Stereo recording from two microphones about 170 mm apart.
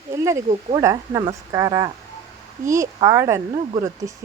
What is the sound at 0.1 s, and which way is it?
Speech, 15° right (ahead or behind).